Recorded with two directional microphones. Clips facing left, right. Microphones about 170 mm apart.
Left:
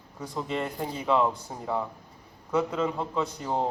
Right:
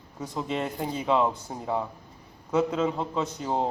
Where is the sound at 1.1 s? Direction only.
5° right (ahead or behind).